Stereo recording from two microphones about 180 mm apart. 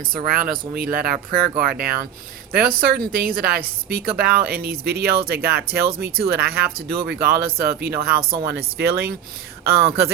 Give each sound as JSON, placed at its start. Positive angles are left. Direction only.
{"t": 0.3, "sound": "a woman's voice", "side_deg": -55}